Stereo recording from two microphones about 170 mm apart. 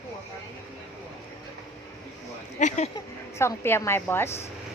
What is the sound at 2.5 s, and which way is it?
Speech, 45° left (ahead or behind).